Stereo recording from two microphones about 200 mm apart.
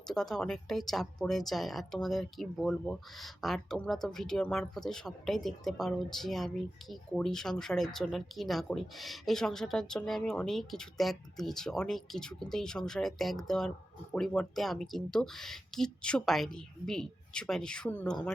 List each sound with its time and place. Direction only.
0.1 s speech: centre (ahead or behind)